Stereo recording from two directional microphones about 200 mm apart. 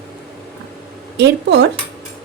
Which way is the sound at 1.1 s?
60° right (ahead or behind).